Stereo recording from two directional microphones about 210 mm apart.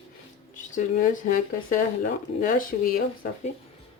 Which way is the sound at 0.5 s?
40° left (ahead or behind).